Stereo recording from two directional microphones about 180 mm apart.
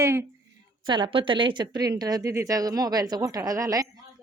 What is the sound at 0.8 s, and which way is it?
Speech, 25° right (ahead or behind).